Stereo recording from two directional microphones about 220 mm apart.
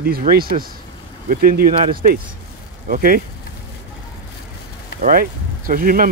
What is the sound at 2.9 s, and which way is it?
Speech, 40° right (ahead or behind).